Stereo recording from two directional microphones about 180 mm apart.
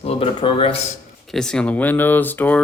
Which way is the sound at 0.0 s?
30° left (ahead or behind).